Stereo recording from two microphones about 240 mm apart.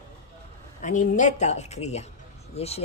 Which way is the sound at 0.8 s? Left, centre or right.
Left.